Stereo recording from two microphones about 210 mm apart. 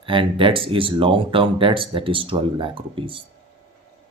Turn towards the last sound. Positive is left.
turn(degrees=-25)  # may be behind; listen again after turning